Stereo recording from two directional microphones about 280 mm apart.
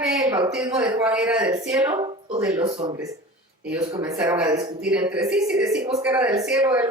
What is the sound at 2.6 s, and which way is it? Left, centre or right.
Speech, centre.